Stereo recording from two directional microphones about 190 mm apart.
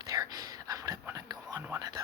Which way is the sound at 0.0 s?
20° right (ahead or behind).